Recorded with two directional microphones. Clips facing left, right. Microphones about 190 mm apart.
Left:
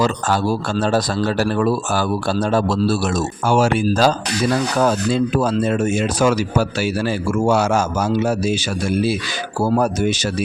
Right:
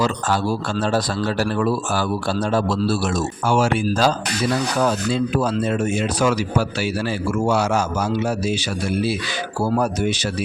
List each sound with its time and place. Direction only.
0.0 s a man's voice: 45° left (ahead or behind)
9.6 s a man's voice: 45° left (ahead or behind)